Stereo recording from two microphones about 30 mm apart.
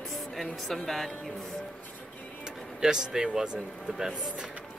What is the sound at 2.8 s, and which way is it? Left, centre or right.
Speech, centre.